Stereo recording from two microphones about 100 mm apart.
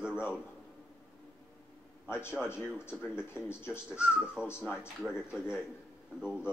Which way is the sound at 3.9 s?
10° right (ahead or behind).